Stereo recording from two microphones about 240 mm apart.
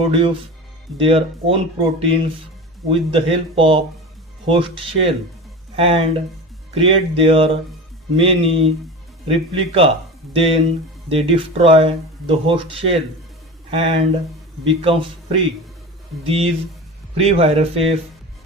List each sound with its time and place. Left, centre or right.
0.0 s speech: right